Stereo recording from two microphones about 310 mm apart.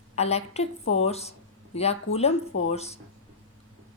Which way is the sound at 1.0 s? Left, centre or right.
Centre.